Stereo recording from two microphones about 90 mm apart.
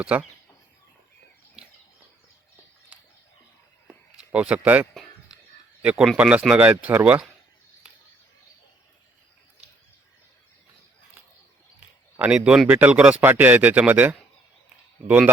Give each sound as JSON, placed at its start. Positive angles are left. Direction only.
{"t": 0.0, "sound": "speech", "side_deg": -15}
{"t": 4.2, "sound": "speech", "side_deg": -15}
{"t": 12.3, "sound": "speech", "side_deg": -10}
{"t": 12.6, "sound": "speech", "side_deg": -20}